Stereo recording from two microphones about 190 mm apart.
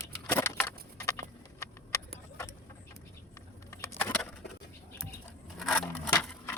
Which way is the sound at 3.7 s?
15° left (ahead or behind).